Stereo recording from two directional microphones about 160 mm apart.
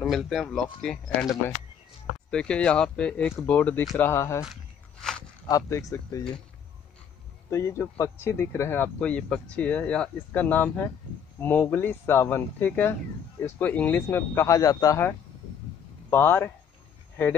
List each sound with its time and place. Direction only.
0.0 s speech: centre (ahead or behind)
2.3 s speech: 5° left (ahead or behind)
5.5 s speech: 20° left (ahead or behind)
7.4 s speech: 15° left (ahead or behind)